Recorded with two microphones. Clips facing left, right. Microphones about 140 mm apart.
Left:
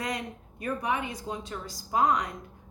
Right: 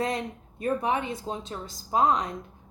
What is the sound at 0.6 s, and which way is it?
A woman's voice, 30° right (ahead or behind).